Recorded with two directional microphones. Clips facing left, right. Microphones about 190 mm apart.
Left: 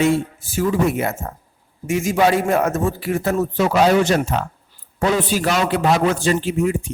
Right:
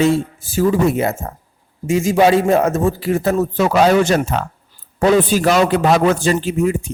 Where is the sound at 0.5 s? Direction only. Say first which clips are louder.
Right 4 dB; 35° right (ahead or behind).